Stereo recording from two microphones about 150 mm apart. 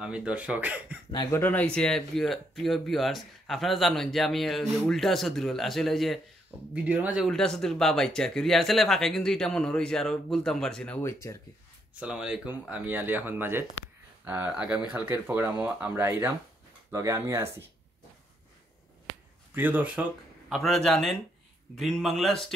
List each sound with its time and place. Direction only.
0.0 s speech: 10° right (ahead or behind)
1.3 s speech: 15° left (ahead or behind); by 7.2 s 10° right (ahead or behind)
7.2 s speech: 5° left (ahead or behind)
11.0 s speech: 20° left (ahead or behind)
11.9 s speech: 5° right (ahead or behind)
19.5 s speech: 10° right (ahead or behind)